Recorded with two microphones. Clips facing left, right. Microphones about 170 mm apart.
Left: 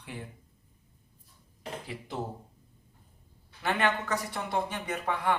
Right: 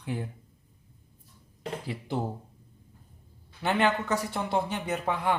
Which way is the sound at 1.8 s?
30° right (ahead or behind).